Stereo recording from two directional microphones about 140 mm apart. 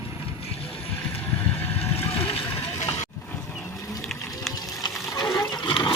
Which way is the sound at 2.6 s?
20° left (ahead or behind).